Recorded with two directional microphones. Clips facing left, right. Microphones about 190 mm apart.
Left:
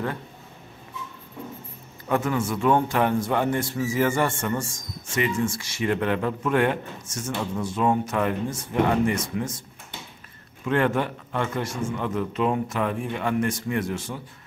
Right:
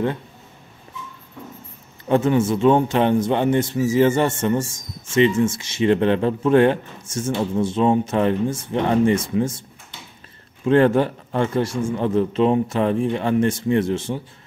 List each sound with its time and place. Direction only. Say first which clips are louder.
2.0 s a man's voice: right 7 dB; 25° right (ahead or behind)
10.6 s a man's voice: right 7 dB; 30° right (ahead or behind)